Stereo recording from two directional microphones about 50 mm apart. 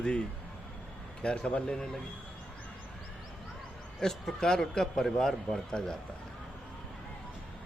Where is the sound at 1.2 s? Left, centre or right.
Centre.